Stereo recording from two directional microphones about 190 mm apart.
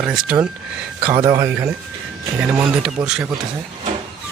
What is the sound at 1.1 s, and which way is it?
Speech, 15° right (ahead or behind).